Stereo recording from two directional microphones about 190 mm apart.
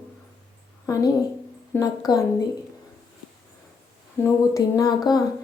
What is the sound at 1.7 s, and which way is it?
Speech, 20° left (ahead or behind).